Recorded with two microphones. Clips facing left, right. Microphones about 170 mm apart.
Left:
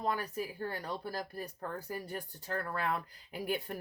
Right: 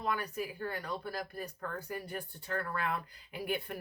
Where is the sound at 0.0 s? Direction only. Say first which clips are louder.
Left 1 dB; 35° left (ahead or behind).